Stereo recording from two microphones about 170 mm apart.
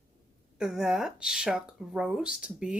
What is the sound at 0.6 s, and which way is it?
A woman's voice, 5° right (ahead or behind).